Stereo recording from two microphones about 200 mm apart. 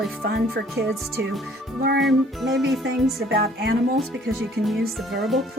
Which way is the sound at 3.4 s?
50° right (ahead or behind).